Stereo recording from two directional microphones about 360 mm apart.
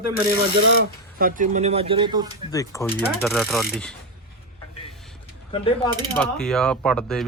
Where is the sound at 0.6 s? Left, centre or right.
Right; by 2.3 s centre.